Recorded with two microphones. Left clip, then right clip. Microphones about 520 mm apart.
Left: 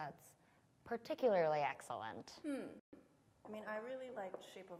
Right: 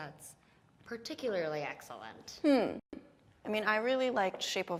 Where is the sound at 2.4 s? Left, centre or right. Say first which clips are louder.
Right 18 dB; right.